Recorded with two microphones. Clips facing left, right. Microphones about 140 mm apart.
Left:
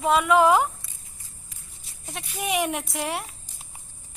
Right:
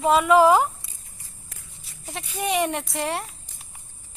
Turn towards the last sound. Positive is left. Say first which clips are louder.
# right 2 dB
turn(degrees=0)  # may be behind; listen again after turning